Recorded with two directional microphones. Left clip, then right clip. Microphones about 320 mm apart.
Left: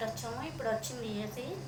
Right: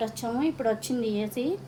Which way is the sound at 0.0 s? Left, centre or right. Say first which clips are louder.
Right 9 dB; right.